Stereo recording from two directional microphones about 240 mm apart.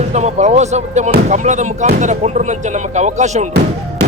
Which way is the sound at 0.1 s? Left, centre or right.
Right.